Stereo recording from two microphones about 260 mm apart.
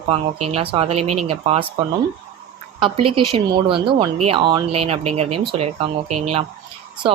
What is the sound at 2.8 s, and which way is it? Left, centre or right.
A woman's voice, centre.